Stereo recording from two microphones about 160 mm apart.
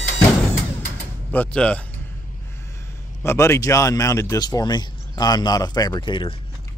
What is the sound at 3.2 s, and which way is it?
Speech, 20° left (ahead or behind).